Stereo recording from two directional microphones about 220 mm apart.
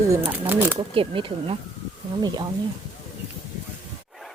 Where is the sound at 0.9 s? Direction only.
25° right (ahead or behind).